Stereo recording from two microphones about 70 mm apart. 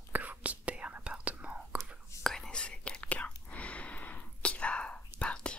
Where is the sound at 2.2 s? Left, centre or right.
Centre.